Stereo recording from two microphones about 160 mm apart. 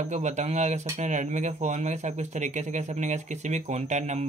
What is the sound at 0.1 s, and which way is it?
Speech, 45° right (ahead or behind).